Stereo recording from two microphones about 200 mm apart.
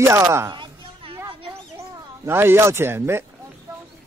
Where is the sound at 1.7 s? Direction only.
15° right (ahead or behind).